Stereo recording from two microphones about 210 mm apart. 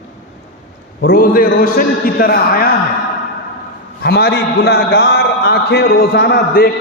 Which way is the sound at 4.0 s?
50° left (ahead or behind).